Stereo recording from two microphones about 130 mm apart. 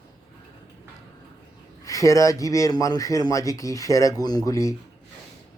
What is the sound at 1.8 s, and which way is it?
Speech, 25° left (ahead or behind).